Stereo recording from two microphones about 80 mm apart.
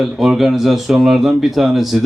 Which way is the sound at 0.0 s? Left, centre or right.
Centre.